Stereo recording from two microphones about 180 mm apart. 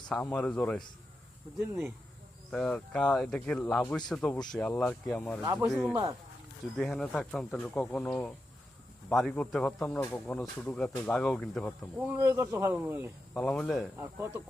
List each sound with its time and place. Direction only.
0.1 s speech: 5° left (ahead or behind)
2.5 s speech: 5° left (ahead or behind)
5.4 s speech: 15° right (ahead or behind)
6.7 s speech: 5° left (ahead or behind)
11.9 s speech: 10° right (ahead or behind)
13.3 s speech: 5° left (ahead or behind)
13.9 s speech: 15° right (ahead or behind)